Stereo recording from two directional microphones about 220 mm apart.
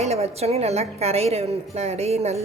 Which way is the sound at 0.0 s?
30° right (ahead or behind).